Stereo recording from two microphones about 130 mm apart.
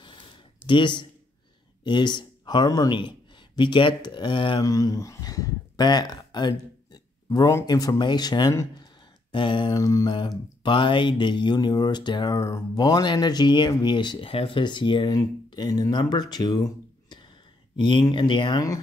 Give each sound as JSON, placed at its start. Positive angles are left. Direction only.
{"t": 0.7, "sound": "speech", "side_deg": 40}
{"t": 4.6, "sound": "speech", "side_deg": 25}
{"t": 9.8, "sound": "mantra", "side_deg": 25}
{"t": 10.6, "sound": "speech", "side_deg": 40}